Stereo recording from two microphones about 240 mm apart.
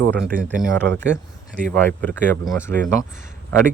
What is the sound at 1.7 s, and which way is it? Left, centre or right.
Speech, centre.